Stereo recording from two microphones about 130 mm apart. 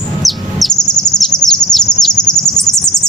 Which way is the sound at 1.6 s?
5° left (ahead or behind).